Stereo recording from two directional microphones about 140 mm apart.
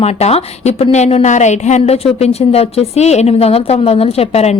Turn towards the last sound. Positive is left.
turn(degrees=50)  # may be behind; listen again after turning